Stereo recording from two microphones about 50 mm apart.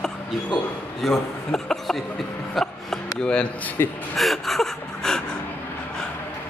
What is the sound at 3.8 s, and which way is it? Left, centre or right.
Speech, left.